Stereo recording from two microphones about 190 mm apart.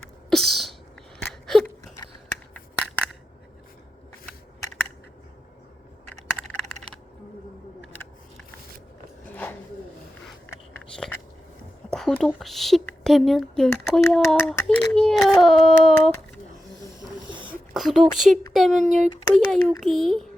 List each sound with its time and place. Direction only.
0.3 s sneeze: centre (ahead or behind)
1.2 s a sound: centre (ahead or behind)
2.5 s crushing: 5° left (ahead or behind)
6.1 s computer keyboard: 35° right (ahead or behind)
9.2 s a sound: 10° left (ahead or behind)
10.2 s biting: centre (ahead or behind)
11.9 s a woman's voice: 5° left (ahead or behind)
17.5 s a sound: centre (ahead or behind)
18.8 s speech: 40° right (ahead or behind)
19.3 s speech: centre (ahead or behind)